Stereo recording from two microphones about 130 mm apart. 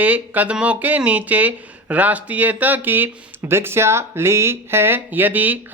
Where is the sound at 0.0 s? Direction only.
10° right (ahead or behind).